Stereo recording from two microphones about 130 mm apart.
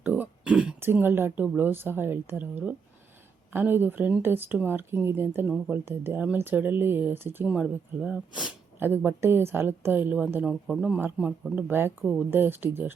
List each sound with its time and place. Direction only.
0.0 s throat clearing: 10° right (ahead or behind)
0.8 s a woman's voice: 15° right (ahead or behind)
9.0 s a woman's voice: 20° right (ahead or behind)